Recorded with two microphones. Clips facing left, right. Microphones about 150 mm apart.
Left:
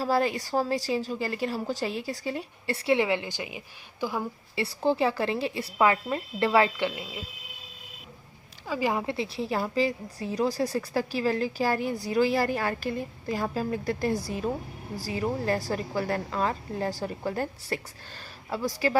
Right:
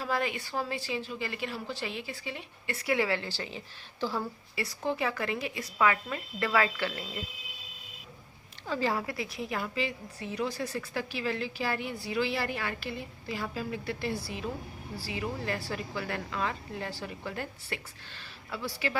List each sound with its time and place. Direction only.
0.0 s a woman's voice: 35° left (ahead or behind); by 4.3 s 15° left (ahead or behind)
4.5 s a woman's voice: 30° left (ahead or behind)
8.6 s a woman's voice: 10° left (ahead or behind); by 18.9 s 40° left (ahead or behind)